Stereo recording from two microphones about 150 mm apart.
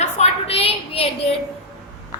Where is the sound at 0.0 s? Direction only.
45° left (ahead or behind).